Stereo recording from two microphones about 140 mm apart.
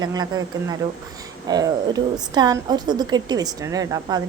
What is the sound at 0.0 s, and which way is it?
Speech, 30° right (ahead or behind).